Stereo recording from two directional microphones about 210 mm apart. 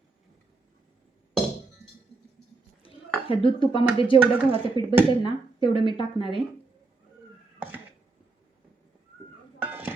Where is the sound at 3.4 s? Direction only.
25° left (ahead or behind).